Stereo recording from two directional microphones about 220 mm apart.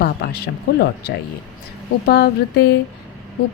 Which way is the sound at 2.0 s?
50° left (ahead or behind).